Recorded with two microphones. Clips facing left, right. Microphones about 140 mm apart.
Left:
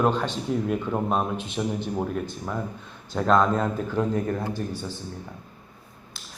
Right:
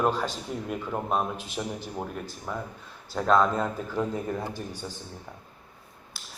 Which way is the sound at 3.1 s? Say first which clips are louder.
Left 2 dB; centre (ahead or behind).